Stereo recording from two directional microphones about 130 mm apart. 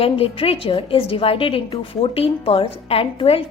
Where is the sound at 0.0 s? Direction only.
45° left (ahead or behind).